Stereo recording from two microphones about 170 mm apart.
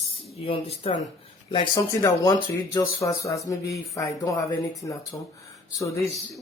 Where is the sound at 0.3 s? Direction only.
35° left (ahead or behind); by 6.0 s 20° left (ahead or behind).